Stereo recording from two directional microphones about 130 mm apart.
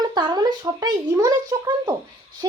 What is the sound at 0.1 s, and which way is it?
A child's voice, 35° right (ahead or behind).